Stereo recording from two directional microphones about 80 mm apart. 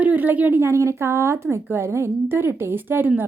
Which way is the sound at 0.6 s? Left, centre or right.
Right.